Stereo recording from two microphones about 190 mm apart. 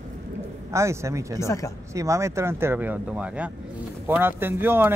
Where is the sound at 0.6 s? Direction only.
15° right (ahead or behind).